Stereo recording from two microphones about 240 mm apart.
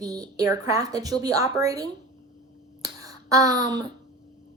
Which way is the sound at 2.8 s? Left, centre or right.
Centre.